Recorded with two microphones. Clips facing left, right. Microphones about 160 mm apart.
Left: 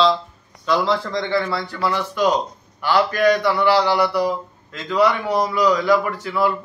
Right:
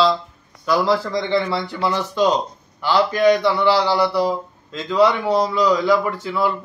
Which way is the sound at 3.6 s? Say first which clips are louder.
Even; 10° left (ahead or behind).